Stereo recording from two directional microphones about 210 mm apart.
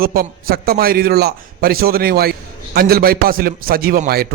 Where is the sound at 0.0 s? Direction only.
45° right (ahead or behind).